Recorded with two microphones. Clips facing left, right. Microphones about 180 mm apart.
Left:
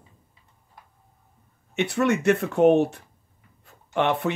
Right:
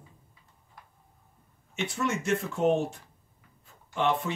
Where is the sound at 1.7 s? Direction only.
65° left (ahead or behind).